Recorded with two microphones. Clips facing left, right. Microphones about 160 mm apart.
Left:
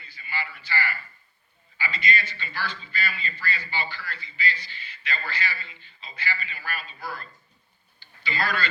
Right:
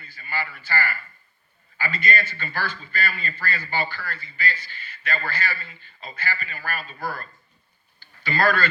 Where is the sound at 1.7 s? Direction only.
50° right (ahead or behind).